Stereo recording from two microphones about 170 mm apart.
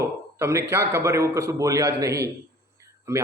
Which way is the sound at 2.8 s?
15° right (ahead or behind).